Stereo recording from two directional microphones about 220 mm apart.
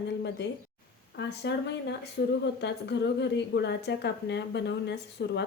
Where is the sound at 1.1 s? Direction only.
50° left (ahead or behind).